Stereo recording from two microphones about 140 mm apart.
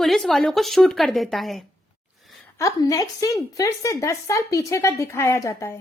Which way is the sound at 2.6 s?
25° left (ahead or behind).